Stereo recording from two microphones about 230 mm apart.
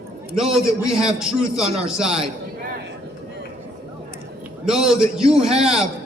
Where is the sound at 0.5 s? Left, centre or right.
Centre.